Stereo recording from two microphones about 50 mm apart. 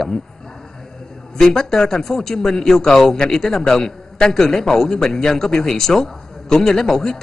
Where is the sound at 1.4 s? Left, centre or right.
Centre.